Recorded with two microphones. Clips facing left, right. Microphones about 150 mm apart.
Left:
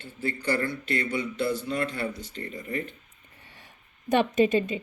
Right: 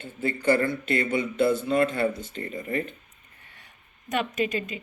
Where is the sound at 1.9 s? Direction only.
50° right (ahead or behind).